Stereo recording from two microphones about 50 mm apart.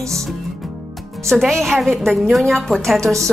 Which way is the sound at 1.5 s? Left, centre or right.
Centre.